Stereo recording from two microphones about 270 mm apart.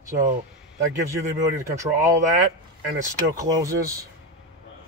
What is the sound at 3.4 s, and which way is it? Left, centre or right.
Speech, centre.